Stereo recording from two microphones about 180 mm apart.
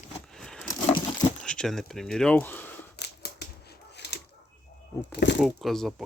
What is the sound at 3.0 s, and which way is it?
Scissors, 70° left (ahead or behind).